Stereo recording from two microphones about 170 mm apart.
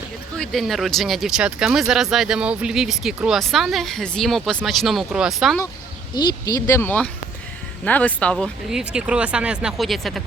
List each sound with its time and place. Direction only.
0.3 s speech: centre (ahead or behind)
6.1 s speech: 20° left (ahead or behind); by 8.8 s 5° left (ahead or behind)
8.8 s speech: 5° right (ahead or behind)